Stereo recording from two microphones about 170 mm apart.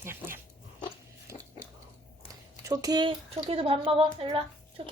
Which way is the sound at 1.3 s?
15° right (ahead or behind).